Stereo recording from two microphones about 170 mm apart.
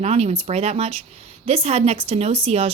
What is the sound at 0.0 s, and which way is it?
Speech, 40° right (ahead or behind).